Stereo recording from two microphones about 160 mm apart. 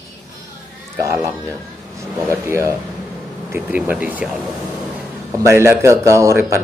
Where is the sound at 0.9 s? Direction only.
20° right (ahead or behind).